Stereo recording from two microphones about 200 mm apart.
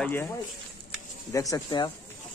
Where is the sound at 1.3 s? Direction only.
15° left (ahead or behind).